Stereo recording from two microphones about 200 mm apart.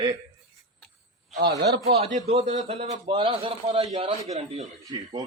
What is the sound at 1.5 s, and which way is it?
Speech, 55° right (ahead or behind).